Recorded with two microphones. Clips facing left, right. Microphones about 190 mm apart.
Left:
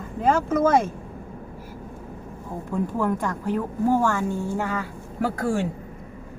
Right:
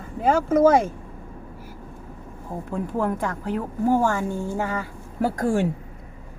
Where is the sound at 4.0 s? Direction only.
15° right (ahead or behind).